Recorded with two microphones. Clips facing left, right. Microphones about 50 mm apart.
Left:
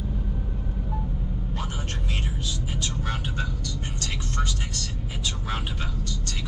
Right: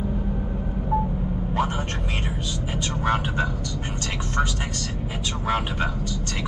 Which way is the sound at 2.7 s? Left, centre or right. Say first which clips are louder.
Right 10 dB; centre.